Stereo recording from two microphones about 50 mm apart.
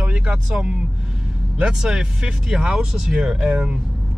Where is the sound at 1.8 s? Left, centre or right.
Centre.